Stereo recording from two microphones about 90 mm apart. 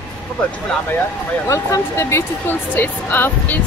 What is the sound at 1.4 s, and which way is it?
Speech, 35° left (ahead or behind).